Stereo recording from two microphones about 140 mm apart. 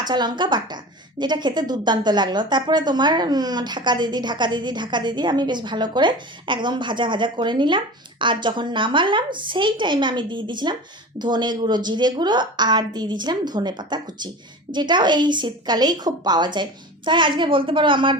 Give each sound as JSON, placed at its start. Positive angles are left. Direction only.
{"t": 0.0, "sound": "a woman's voice", "side_deg": -30}